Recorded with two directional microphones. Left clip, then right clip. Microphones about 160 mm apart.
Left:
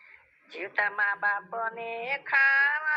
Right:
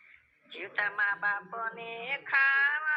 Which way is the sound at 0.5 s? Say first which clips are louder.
Left 3 dB; 40° left (ahead or behind).